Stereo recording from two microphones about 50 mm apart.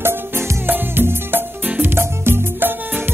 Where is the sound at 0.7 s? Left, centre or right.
Right.